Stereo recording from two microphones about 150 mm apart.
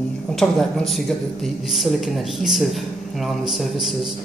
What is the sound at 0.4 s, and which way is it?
Speech, centre (ahead or behind).